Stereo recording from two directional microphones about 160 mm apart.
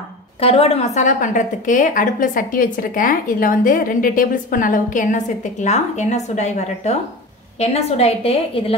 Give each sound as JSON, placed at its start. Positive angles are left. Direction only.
{"t": 0.4, "sound": "a woman's voice", "side_deg": 40}